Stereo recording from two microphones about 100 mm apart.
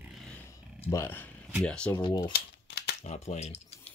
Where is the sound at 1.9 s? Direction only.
40° left (ahead or behind).